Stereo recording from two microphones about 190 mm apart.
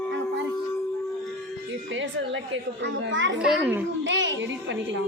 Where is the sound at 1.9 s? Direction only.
80° right.